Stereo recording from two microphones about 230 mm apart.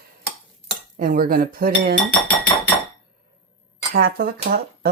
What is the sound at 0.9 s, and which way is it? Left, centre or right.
Speech, right.